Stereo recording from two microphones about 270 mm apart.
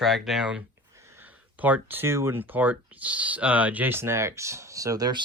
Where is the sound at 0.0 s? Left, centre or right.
Centre.